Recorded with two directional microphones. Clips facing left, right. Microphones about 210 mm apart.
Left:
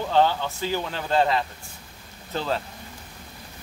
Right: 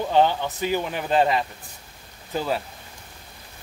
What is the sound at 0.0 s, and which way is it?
Speech, 15° right (ahead or behind).